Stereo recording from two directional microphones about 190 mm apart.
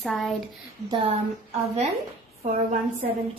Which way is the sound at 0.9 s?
30° right (ahead or behind).